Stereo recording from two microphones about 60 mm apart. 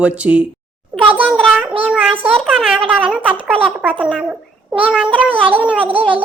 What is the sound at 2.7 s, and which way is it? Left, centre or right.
A child's voice, right.